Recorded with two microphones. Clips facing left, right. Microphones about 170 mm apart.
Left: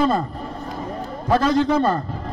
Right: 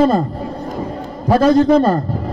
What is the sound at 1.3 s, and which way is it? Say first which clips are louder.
Speech: right 7 dB; 40° right (ahead or behind).